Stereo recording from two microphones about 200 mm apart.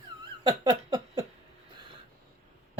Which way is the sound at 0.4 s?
20° right (ahead or behind).